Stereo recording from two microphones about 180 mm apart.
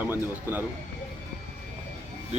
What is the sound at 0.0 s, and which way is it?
Speech, 10° right (ahead or behind).